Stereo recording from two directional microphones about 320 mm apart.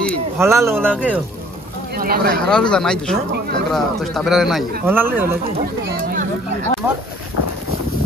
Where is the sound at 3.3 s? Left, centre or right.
Right.